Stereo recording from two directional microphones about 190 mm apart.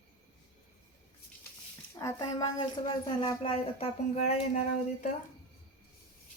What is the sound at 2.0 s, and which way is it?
Speech, 20° left (ahead or behind).